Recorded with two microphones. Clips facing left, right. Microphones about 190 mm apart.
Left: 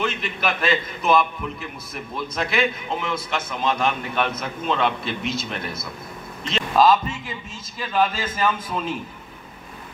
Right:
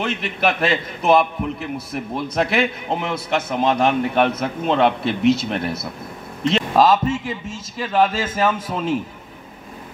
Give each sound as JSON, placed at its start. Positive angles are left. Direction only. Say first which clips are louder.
{"t": 0.0, "sound": "a man's voice", "louder": "right 4 dB", "side_deg": -70}
{"t": 6.8, "sound": "a man's voice", "louder": "right 1 dB", "side_deg": -80}